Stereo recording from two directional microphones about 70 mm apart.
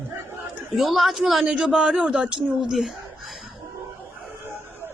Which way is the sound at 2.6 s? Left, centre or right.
Centre.